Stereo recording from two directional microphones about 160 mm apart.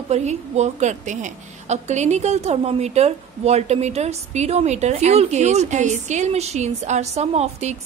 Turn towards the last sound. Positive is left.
turn(degrees=-45)  # may be behind; listen again after turning